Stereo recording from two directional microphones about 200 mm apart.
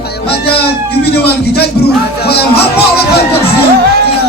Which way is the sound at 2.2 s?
55° left (ahead or behind).